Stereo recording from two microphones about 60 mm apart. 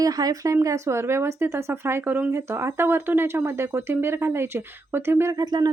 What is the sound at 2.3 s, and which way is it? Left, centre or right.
A woman's voice, right.